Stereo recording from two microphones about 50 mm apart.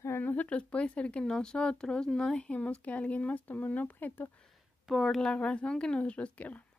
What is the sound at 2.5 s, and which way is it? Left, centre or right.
A woman's voice, left.